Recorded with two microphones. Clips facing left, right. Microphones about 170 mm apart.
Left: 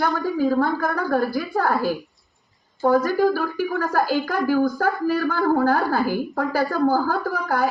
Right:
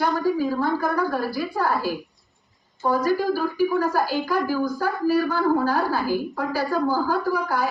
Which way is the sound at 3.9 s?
55° left (ahead or behind).